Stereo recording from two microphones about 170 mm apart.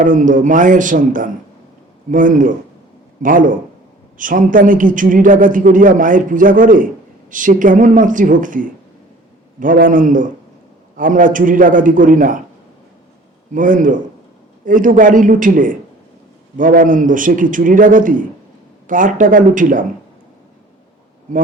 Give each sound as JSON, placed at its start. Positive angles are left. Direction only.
{"t": 0.0, "sound": "a man's voice", "side_deg": -50}
{"t": 13.5, "sound": "a man's voice", "side_deg": -50}